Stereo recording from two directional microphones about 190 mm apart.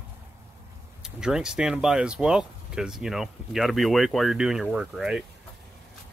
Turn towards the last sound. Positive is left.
turn(degrees=-5)  # may be behind; listen again after turning